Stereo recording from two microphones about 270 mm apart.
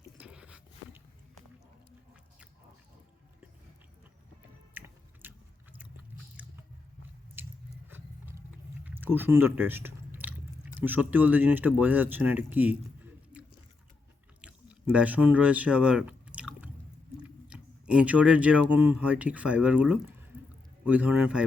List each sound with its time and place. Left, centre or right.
0.2 s a sound: centre
4.8 s music: centre
5.2 s chewing: centre
7.4 s chewing: centre
10.8 s speech: centre
13.3 s chewing: centre
14.4 s a sound: centre
17.2 s speech: centre
20.3 s a sound: centre
20.8 s a man's voice: centre